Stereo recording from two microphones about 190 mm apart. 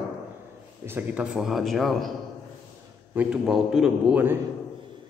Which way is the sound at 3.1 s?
5° right (ahead or behind).